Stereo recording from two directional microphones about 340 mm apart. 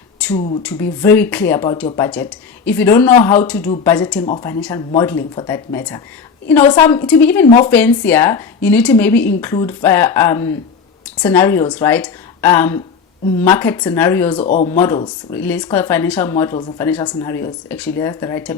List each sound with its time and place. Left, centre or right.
0.2 s speech: centre
14.4 s speech: left
14.7 s speech: centre